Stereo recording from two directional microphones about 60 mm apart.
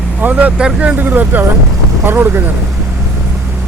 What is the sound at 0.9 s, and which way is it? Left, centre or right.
Speech, right.